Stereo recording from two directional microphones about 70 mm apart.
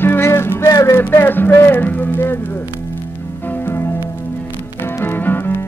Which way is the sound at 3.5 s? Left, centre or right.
Left.